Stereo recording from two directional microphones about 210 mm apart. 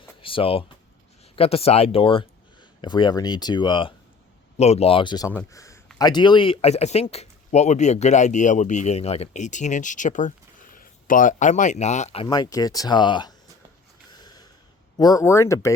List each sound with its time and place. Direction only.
0.0 s a sound: 25° left (ahead or behind)
1.2 s a man's voice: 30° left (ahead or behind)
14.1 s snort: 20° left (ahead or behind)
14.9 s speech: 20° left (ahead or behind)